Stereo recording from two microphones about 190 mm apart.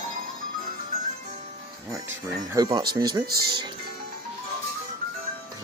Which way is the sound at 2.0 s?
10° right (ahead or behind).